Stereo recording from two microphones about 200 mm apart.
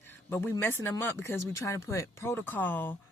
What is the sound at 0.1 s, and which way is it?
Speech, 10° left (ahead or behind).